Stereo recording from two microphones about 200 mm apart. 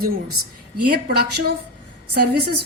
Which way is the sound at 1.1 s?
55° right (ahead or behind).